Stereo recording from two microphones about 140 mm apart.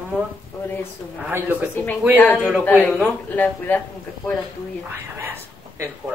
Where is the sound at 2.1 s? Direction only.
10° left (ahead or behind).